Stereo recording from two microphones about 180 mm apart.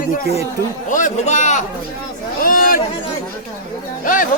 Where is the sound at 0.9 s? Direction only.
45° left (ahead or behind).